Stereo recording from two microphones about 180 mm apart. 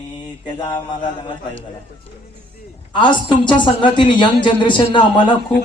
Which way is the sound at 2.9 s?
25° left (ahead or behind).